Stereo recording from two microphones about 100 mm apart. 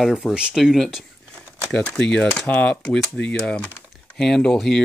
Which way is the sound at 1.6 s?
5° left (ahead or behind).